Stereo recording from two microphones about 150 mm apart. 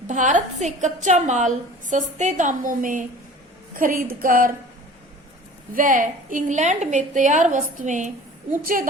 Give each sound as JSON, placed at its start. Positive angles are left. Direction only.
{"t": 0.1, "sound": "a woman's voice", "side_deg": -55}
{"t": 5.7, "sound": "a woman's voice", "side_deg": -65}